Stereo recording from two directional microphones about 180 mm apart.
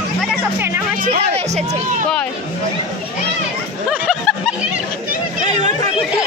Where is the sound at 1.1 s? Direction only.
35° right (ahead or behind).